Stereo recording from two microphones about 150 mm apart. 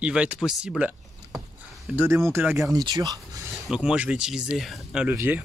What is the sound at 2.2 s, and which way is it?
Speech, 15° right (ahead or behind).